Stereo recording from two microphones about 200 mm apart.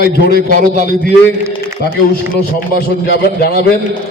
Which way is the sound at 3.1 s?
50° left (ahead or behind).